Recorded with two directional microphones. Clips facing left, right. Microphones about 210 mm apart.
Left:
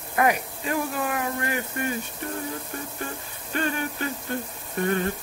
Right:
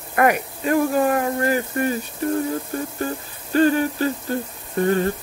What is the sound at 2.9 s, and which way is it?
Speech, 35° right (ahead or behind).